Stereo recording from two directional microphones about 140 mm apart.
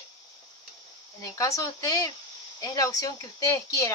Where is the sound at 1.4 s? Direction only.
25° left (ahead or behind).